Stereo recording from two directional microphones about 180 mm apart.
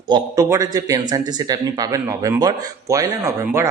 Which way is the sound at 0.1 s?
20° right (ahead or behind).